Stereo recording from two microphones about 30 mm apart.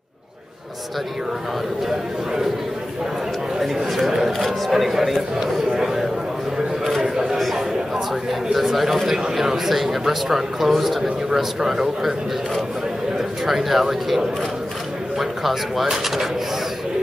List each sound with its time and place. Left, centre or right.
3.7 s speech: centre
4.6 s speech: centre
5.1 s a man's voice: centre
7.0 s a sound: centre
9.0 s speech: centre
13.5 s speech: centre